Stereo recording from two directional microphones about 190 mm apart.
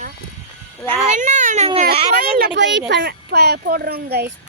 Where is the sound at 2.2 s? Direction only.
55° right (ahead or behind).